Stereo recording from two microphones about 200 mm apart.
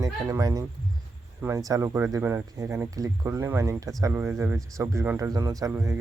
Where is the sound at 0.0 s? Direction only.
20° right (ahead or behind).